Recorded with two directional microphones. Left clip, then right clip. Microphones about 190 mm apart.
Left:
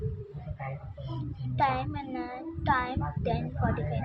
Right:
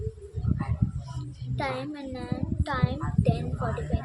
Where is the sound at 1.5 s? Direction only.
15° right (ahead or behind).